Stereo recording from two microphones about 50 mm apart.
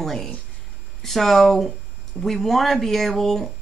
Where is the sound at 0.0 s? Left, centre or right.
Centre.